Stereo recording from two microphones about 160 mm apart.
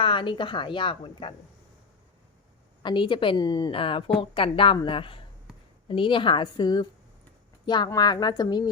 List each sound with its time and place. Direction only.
0.0 s a woman's voice: 30° left (ahead or behind)
2.8 s a woman's voice: 30° left (ahead or behind)